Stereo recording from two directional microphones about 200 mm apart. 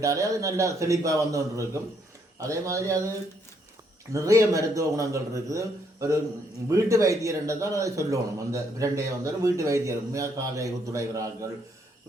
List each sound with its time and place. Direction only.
0.0 s a man's voice: 15° right (ahead or behind)
4.1 s a man's voice: 15° right (ahead or behind)